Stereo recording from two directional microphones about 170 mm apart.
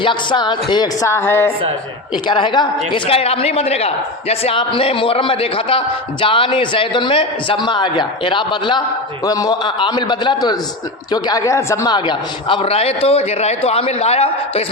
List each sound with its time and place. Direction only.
0.0 s speech: 30° left (ahead or behind)
2.2 s a man's voice: 30° left (ahead or behind)